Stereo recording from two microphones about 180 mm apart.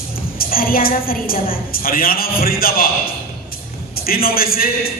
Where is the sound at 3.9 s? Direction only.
55° left (ahead or behind).